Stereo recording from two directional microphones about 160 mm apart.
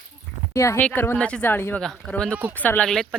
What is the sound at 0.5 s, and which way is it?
Speech, 20° left (ahead or behind).